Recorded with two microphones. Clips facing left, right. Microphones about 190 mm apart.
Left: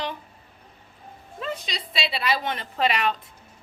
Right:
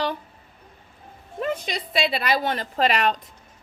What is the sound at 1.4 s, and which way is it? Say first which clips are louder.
A woman's voice: right 5 dB; 50° right (ahead or behind).